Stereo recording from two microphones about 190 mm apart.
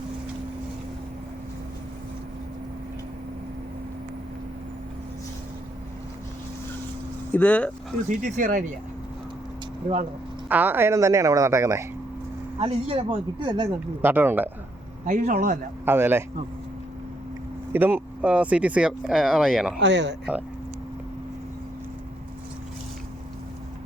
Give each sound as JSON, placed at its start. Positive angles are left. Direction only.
{"t": 7.3, "sound": "speech", "side_deg": 5}
{"t": 8.1, "sound": "speech", "side_deg": -45}
{"t": 10.5, "sound": "speech", "side_deg": -10}
{"t": 12.5, "sound": "speech", "side_deg": -30}
{"t": 14.0, "sound": "speech", "side_deg": -10}
{"t": 15.0, "sound": "speech", "side_deg": -45}
{"t": 15.9, "sound": "speech", "side_deg": -10}
{"t": 17.7, "sound": "speech", "side_deg": -10}
{"t": 19.8, "sound": "speech", "side_deg": -65}